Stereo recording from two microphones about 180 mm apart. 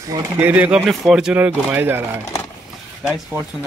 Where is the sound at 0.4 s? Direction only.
10° right (ahead or behind).